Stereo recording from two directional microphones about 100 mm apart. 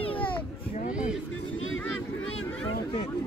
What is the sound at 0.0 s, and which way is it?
Children playing, 65° left (ahead or behind).